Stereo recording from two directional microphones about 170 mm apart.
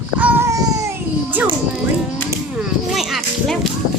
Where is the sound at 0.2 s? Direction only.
10° right (ahead or behind).